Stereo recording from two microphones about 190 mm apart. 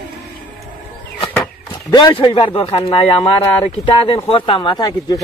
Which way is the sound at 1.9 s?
25° left (ahead or behind).